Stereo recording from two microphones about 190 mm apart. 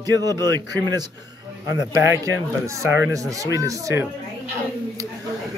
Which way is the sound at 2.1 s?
15° right (ahead or behind).